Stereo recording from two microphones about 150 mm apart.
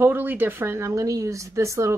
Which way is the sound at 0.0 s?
15° right (ahead or behind).